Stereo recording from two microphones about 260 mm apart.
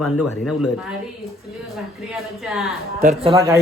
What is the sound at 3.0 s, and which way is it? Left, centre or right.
Speech, right.